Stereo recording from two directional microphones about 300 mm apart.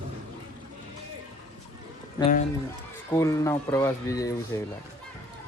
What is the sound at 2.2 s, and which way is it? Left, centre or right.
Speech, left.